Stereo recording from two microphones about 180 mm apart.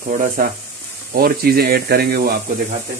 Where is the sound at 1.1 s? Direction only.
55° right (ahead or behind).